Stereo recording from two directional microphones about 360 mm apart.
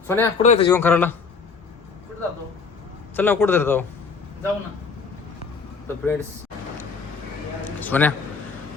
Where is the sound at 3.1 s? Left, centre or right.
Centre.